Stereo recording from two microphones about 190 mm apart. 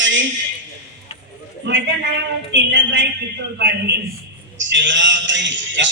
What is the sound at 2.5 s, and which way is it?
A man's voice, 70° right (ahead or behind).